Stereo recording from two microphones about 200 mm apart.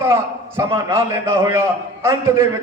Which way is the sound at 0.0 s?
15° right (ahead or behind).